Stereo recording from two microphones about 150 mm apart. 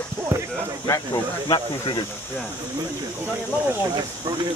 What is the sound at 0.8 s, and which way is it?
Speech, 25° left (ahead or behind).